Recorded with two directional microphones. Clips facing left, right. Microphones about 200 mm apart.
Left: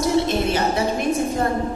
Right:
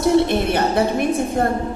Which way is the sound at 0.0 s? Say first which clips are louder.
Right 3 dB; 60° right (ahead or behind).